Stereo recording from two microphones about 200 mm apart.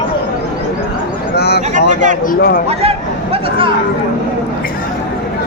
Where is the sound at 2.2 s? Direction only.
45° left (ahead or behind).